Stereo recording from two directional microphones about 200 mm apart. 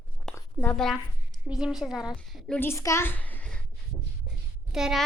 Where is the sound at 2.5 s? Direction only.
10° left (ahead or behind).